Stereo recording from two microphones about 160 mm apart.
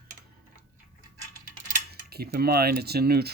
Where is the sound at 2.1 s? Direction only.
75° right (ahead or behind).